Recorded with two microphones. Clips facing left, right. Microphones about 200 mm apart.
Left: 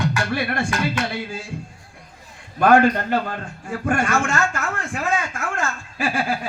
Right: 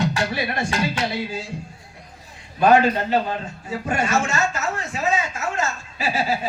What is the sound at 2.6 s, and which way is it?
A man's voice, 55° left (ahead or behind).